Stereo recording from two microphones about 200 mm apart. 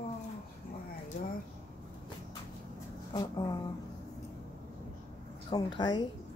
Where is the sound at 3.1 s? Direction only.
20° left (ahead or behind).